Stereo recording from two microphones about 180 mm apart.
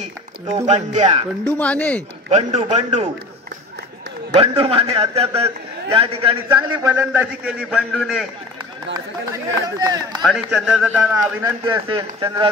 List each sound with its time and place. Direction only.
0.7 s a man's voice: 40° right (ahead or behind)
1.6 s speech: 5° left (ahead or behind)
2.2 s a man's voice: 40° right (ahead or behind)
4.3 s a man's voice: 30° right (ahead or behind)
6.9 s a man's voice: 10° right (ahead or behind)
8.9 s speech: 20° right (ahead or behind)
10.2 s a man's voice: centre (ahead or behind)
11.6 s speech: 20° right (ahead or behind)